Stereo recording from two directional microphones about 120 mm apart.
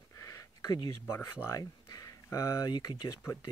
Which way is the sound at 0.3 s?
30° left (ahead or behind).